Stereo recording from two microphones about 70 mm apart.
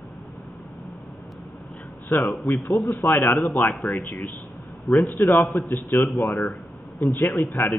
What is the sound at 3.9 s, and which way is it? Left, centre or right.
Speech, left.